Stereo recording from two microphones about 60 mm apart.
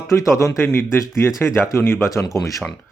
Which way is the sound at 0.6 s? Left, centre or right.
Left.